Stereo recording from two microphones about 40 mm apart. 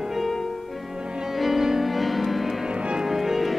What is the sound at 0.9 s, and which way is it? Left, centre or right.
Music, centre.